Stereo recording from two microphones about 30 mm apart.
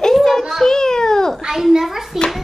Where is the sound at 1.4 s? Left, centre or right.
Centre.